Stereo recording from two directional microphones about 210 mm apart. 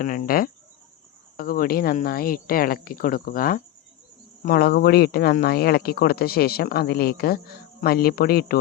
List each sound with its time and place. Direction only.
0.0 s speech: 40° left (ahead or behind)